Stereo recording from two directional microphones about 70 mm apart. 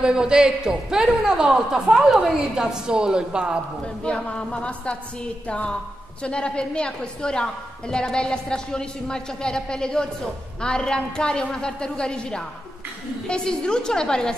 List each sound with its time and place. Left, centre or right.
0.0 s a man's voice: centre
3.8 s a woman's voice: centre